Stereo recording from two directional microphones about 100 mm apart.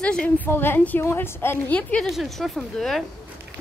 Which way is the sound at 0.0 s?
10° left (ahead or behind).